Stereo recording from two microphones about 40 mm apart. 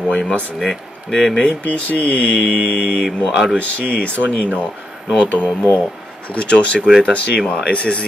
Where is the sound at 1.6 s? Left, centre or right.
Left.